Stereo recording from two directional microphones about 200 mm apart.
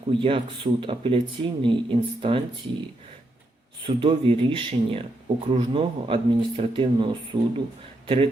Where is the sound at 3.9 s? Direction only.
25° right (ahead or behind).